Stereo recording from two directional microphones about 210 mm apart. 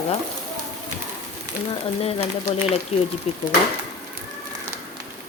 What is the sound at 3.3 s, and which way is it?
Speech, 30° left (ahead or behind).